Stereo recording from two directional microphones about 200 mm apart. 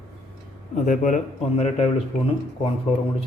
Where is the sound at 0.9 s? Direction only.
40° left (ahead or behind).